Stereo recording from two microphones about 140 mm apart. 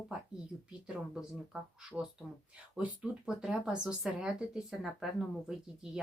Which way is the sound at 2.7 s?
10° right (ahead or behind).